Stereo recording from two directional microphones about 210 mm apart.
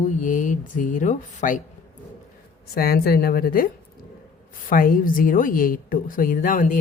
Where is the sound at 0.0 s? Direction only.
40° left (ahead or behind).